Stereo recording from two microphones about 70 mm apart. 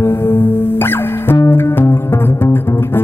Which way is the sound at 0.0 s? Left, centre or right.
Left.